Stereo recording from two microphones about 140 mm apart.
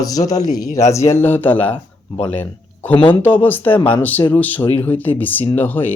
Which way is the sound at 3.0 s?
35° left (ahead or behind).